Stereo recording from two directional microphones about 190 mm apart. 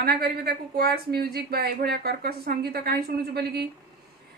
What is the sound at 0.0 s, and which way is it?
Speech, 55° right (ahead or behind).